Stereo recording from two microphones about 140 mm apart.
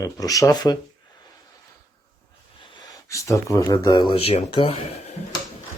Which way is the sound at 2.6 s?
30° left (ahead or behind).